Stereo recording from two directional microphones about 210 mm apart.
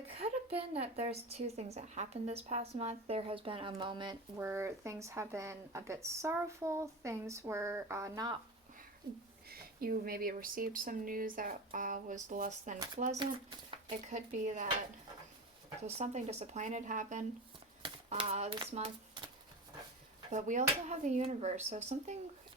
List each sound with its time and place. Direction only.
0.2 s a woman's voice: 25° right (ahead or behind)
9.5 s speech: 45° right (ahead or behind)
15.9 s speech: 30° right (ahead or behind)
20.3 s speech: 35° right (ahead or behind)